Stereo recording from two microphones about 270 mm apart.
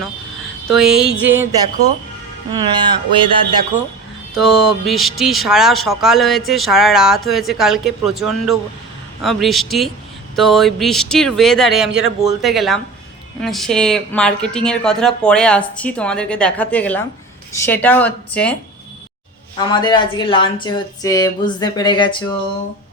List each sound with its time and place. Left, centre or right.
0.7 s speech: centre
4.4 s speech: centre
19.5 s speech: centre